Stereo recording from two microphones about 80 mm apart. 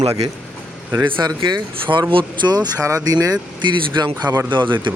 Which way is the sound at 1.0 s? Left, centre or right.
Right.